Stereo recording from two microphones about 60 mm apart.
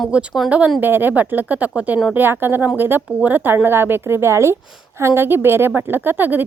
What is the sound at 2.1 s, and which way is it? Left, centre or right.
A woman's voice, right.